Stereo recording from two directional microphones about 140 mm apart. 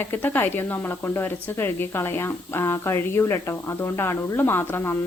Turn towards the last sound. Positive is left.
turn(degrees=15)  # may be behind; listen again after turning